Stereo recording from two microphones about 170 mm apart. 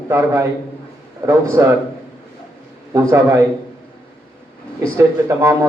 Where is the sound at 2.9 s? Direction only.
15° right (ahead or behind).